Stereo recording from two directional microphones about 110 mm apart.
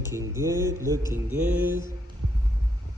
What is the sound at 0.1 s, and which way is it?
Speech, 25° right (ahead or behind).